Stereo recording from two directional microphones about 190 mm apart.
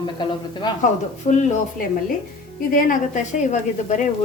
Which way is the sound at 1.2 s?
40° left (ahead or behind).